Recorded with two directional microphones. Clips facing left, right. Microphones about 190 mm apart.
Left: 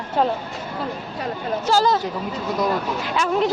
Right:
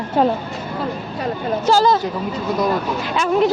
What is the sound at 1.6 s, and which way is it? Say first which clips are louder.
Speech: right 4 dB; 25° right (ahead or behind).